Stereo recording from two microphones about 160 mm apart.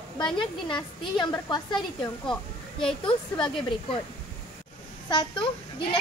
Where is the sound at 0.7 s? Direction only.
30° left (ahead or behind).